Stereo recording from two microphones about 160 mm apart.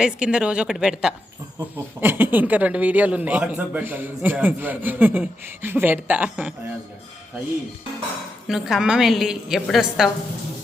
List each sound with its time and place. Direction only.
0.0 s a woman's voice: 5° right (ahead or behind)
8.4 s a woman's voice: centre (ahead or behind)